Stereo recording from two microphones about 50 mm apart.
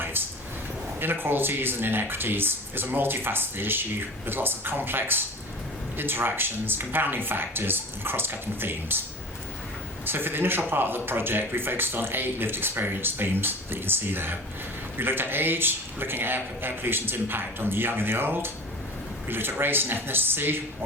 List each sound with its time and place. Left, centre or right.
0.0 s a sound: right
0.9 s a man's voice: right
10.1 s a man's voice: right